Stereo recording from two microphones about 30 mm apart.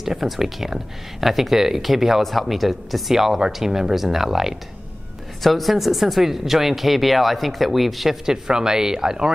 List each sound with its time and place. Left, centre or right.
0.0 s speech: centre
2.2 s speech: centre
5.4 s speech: centre
8.3 s speech: right